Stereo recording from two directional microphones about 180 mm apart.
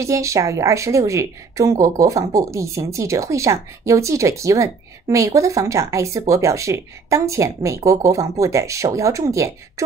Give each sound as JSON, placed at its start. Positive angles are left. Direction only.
{"t": 0.0, "sound": "speech", "side_deg": -15}